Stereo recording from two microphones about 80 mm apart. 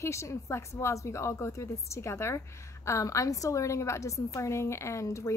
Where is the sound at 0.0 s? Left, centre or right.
Left.